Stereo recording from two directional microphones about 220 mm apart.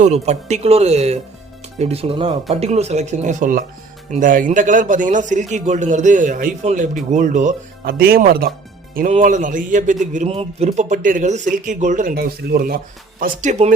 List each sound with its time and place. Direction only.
0.0 s a man's voice: 30° right (ahead or behind)